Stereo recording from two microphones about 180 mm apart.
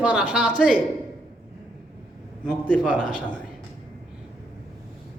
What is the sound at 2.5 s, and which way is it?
Speech, 5° left (ahead or behind).